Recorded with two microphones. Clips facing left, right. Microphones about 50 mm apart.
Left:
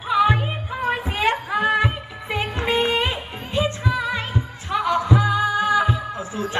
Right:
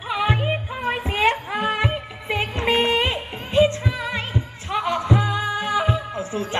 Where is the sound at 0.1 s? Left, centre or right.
Right.